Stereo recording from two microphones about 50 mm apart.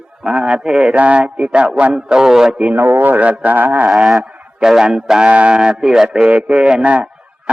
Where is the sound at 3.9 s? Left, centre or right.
Centre.